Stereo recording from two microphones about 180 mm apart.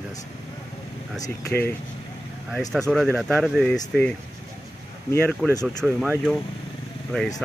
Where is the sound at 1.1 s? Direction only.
15° left (ahead or behind).